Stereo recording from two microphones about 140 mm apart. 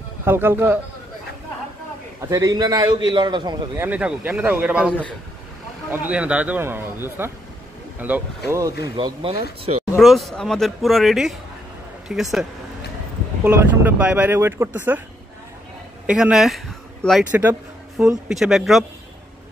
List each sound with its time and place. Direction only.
0.2 s speech: 15° right (ahead or behind)
2.2 s a man's voice: 25° right (ahead or behind)
3.7 s speech: 15° right (ahead or behind)
8.5 s a man's voice: 25° right (ahead or behind)
8.9 s speech: 40° right (ahead or behind)
9.9 s speech: centre (ahead or behind); by 15.0 s 15° right (ahead or behind)
16.1 s speech: 5° right (ahead or behind)
17.3 s speech: 15° right (ahead or behind)
18.3 s speech: centre (ahead or behind)